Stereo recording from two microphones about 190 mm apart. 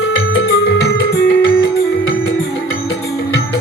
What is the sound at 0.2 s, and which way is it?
Music, 75° left (ahead or behind).